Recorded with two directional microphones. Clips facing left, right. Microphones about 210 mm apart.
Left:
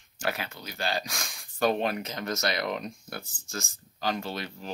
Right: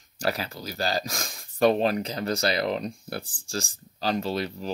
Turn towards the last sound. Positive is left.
turn(degrees=-35)  # may be behind; listen again after turning